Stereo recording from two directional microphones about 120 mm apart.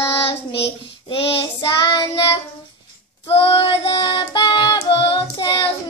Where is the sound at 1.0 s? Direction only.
50° left (ahead or behind).